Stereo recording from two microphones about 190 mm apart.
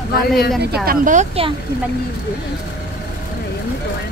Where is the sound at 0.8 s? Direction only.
45° right (ahead or behind).